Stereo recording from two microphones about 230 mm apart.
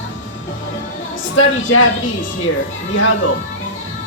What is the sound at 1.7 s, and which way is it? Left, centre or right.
Speech, left.